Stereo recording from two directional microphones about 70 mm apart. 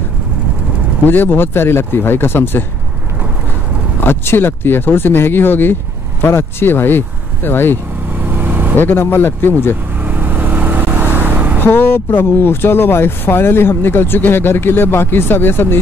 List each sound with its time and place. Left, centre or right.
1.0 s speech: left
4.0 s speech: left
8.2 s vehicle: right
8.7 s speech: left
10.0 s vehicle: right
11.6 s speech: left